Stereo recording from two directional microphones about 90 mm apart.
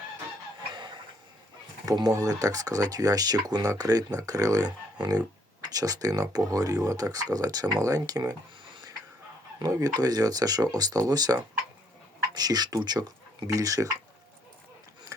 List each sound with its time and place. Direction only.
0.7 s a sound: 60° right (ahead or behind)
2.0 s speech: 40° right (ahead or behind)
9.6 s speech: 45° right (ahead or behind)